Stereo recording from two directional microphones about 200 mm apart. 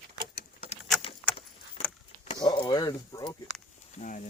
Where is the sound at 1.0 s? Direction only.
25° left (ahead or behind).